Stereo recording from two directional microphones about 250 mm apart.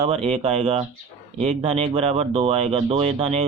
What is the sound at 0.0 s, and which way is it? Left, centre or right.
Speech, right.